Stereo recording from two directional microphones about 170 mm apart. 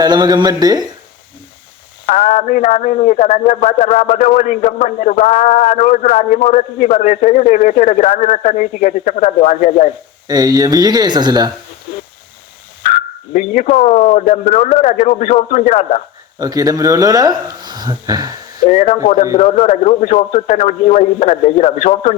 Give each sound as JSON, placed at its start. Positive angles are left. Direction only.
{"t": 0.0, "sound": "speech", "side_deg": -25}
{"t": 2.4, "sound": "a man's voice", "side_deg": 45}
{"t": 10.2, "sound": "speech", "side_deg": -25}
{"t": 12.8, "sound": "a man's voice", "side_deg": 45}
{"t": 16.4, "sound": "speech", "side_deg": -20}
{"t": 19.1, "sound": "a man's voice", "side_deg": 50}